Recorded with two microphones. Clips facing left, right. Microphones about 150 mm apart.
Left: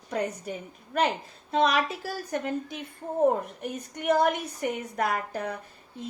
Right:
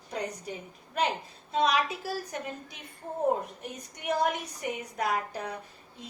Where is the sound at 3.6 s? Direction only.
50° left (ahead or behind).